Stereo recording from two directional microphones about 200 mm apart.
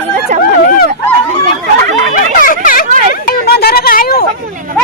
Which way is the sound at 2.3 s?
45° left (ahead or behind).